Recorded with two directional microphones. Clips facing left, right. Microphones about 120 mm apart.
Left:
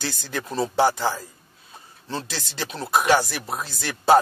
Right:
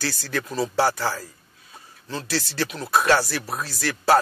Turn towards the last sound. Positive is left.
turn(degrees=20)  # may be behind; listen again after turning